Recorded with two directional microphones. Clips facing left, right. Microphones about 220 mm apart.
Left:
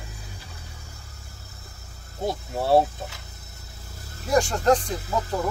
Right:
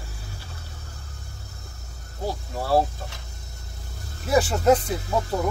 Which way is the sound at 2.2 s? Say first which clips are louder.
Left 3 dB; 20° left (ahead or behind).